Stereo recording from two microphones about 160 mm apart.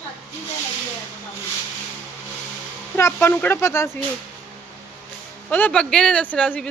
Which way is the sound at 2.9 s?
15° left (ahead or behind).